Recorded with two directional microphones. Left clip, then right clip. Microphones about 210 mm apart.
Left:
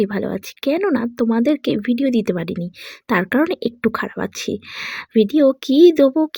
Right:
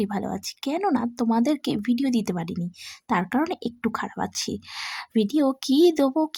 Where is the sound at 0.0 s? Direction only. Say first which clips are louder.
Left 7 dB; 10° left (ahead or behind).